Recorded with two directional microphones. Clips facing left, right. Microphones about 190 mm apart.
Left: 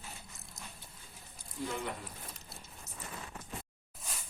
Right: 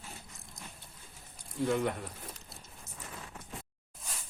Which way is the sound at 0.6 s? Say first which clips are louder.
Right 1 dB; 5° left (ahead or behind).